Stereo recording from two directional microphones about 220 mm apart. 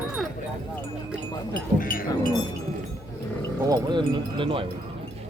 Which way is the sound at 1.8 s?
40° left (ahead or behind).